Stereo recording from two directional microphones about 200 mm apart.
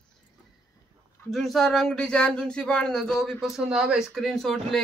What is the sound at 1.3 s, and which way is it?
Speech, centre (ahead or behind).